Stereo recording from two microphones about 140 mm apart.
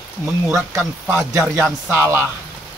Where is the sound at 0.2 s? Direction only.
20° right (ahead or behind).